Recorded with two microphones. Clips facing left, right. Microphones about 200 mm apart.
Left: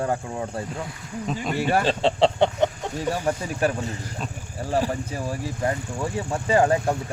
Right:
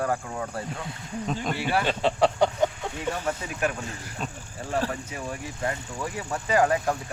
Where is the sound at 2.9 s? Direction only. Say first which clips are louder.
Left 4 dB; 35° left (ahead or behind).